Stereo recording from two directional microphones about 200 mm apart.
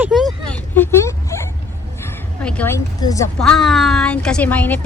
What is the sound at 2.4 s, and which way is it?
Speech, 5° left (ahead or behind).